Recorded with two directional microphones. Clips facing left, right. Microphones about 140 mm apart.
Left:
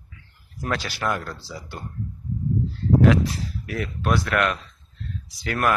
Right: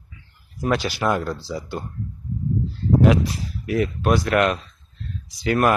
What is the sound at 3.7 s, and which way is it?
Speech, 20° right (ahead or behind).